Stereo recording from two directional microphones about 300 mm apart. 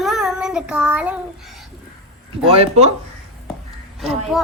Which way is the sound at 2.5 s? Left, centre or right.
Centre.